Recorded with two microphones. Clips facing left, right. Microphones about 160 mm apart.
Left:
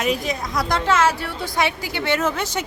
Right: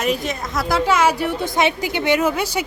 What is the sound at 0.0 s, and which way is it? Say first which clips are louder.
A woman's voice: right 1 dB; centre (ahead or behind).